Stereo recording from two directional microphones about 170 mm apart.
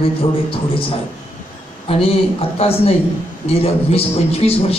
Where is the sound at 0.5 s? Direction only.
30° left (ahead or behind).